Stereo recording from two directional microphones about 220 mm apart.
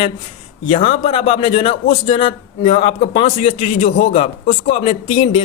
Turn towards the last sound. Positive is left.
turn(degrees=25)  # may be behind; listen again after turning